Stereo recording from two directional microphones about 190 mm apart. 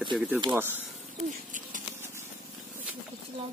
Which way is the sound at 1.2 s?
40° right (ahead or behind).